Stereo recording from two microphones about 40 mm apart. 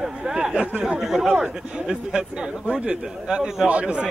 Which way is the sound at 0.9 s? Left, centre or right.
Centre.